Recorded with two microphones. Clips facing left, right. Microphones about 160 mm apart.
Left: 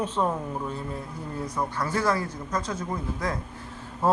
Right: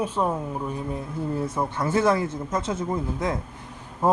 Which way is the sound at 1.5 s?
25° right (ahead or behind).